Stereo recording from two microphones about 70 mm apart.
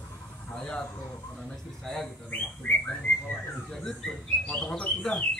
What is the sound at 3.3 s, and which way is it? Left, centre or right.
Speech, centre.